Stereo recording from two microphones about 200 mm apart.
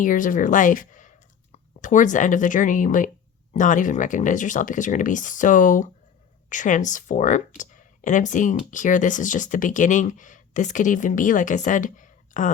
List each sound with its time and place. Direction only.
0.0 s speech: 40° left (ahead or behind)